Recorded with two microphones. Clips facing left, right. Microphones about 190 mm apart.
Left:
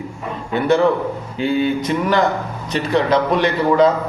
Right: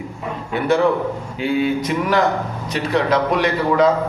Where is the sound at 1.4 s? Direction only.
5° right (ahead or behind).